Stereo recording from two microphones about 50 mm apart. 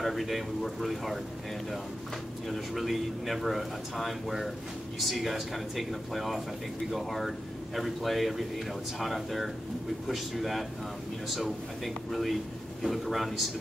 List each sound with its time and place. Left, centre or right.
0.0 s a man's voice: centre
2.4 s a man's voice: centre